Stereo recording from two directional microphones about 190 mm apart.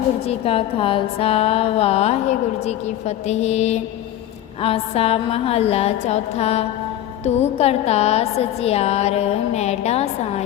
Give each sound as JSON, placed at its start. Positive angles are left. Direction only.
{"t": 0.3, "sound": "a woman's voice", "side_deg": 30}